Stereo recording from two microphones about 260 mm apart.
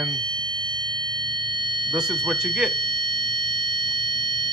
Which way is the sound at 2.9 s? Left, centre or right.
Centre.